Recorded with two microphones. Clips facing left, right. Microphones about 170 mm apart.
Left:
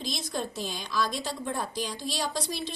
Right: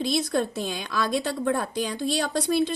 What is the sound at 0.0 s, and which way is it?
A woman's voice, 65° right (ahead or behind).